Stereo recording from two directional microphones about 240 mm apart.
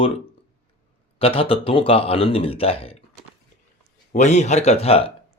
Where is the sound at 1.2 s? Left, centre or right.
Left.